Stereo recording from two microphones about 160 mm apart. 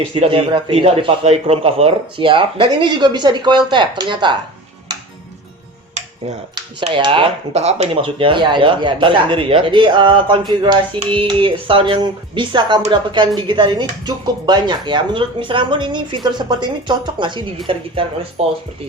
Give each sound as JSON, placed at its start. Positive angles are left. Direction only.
{"t": 0.1, "sound": "speech", "side_deg": -35}
{"t": 6.7, "sound": "speech", "side_deg": -30}